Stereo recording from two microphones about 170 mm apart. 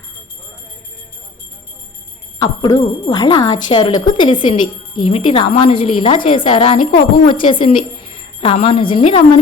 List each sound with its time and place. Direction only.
2.4 s speech: 25° left (ahead or behind)